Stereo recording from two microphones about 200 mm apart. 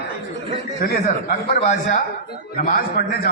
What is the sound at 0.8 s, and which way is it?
Speech, 50° left (ahead or behind).